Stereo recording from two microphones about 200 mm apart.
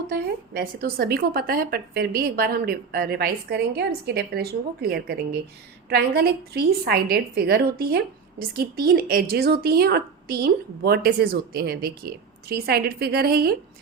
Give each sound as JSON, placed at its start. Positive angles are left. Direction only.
{"t": 0.1, "sound": "a woman's voice", "side_deg": -50}